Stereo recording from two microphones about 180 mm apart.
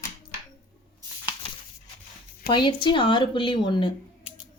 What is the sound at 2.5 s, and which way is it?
A woman's voice, 25° left (ahead or behind).